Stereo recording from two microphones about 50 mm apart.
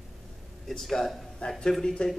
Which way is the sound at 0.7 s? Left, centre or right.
Centre.